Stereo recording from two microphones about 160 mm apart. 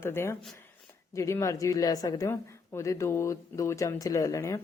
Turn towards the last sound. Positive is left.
turn(degrees=20)  # may be behind; listen again after turning